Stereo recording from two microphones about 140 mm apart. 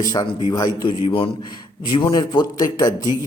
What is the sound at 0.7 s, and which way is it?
Speech, 35° left (ahead or behind).